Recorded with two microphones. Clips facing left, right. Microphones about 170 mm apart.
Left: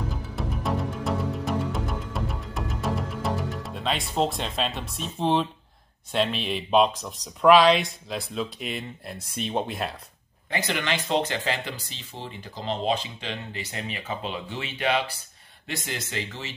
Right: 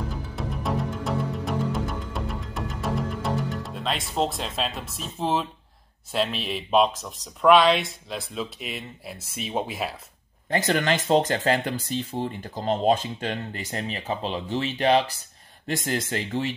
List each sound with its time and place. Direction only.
0.0 s music: centre (ahead or behind)
6.1 s speech: centre (ahead or behind)
10.5 s speech: 45° right (ahead or behind)